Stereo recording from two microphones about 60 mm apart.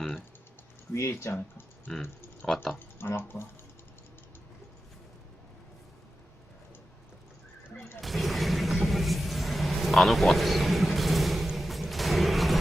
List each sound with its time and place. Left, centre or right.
0.9 s speech: left
2.0 s a sound: left
8.0 s music: centre